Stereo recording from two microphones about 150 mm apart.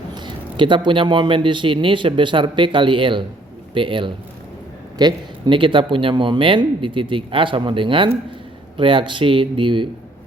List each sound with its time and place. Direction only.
0.1 s a man's voice: 35° right (ahead or behind)